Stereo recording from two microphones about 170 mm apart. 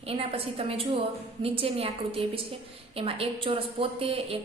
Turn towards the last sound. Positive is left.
turn(degrees=-35)  # may be behind; listen again after turning